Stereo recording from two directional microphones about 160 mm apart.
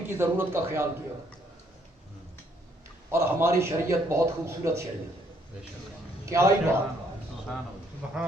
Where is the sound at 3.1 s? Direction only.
15° right (ahead or behind).